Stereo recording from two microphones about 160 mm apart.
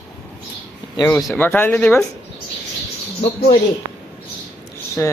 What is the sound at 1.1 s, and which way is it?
Speech, centre (ahead or behind).